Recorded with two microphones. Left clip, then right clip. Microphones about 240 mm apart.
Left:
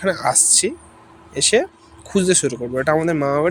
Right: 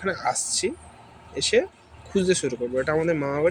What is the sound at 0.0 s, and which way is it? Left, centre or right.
Speech, left.